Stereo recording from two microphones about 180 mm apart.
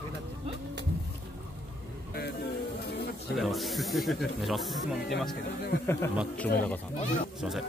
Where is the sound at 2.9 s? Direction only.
65° left (ahead or behind).